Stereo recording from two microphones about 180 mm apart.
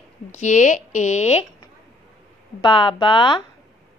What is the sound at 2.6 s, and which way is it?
Speech, 30° left (ahead or behind).